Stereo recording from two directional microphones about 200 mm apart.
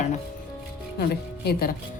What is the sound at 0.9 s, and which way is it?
Speech, 50° left (ahead or behind).